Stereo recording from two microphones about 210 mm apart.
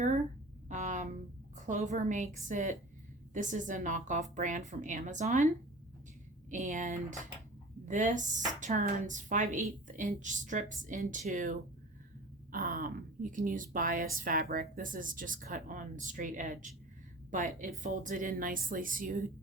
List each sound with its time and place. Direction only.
0.7 s a sound: 35° right (ahead or behind)
1.5 s a woman's voice: 35° right (ahead or behind)
6.5 s a woman's voice: 35° right (ahead or behind)